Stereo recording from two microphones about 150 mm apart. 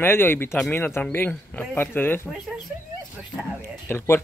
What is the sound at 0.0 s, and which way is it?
Speech, 15° left (ahead or behind).